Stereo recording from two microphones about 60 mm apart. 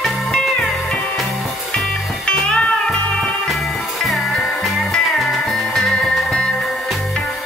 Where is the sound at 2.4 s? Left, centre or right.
Centre.